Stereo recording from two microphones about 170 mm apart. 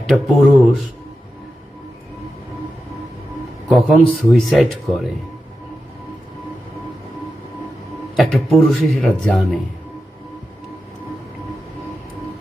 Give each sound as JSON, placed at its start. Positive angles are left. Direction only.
{"t": 0.0, "sound": "speech", "side_deg": 0}
{"t": 3.7, "sound": "speech", "side_deg": 0}
{"t": 8.1, "sound": "speech", "side_deg": 0}